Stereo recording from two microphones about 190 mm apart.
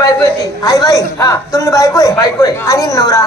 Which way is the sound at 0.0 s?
20° left (ahead or behind).